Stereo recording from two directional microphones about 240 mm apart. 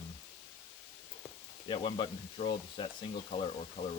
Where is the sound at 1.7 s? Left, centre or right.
Centre.